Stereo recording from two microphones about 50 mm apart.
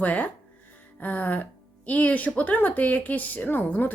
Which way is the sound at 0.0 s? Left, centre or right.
Left.